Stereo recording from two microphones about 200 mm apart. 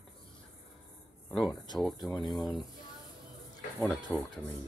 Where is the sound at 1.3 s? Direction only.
Centre (ahead or behind).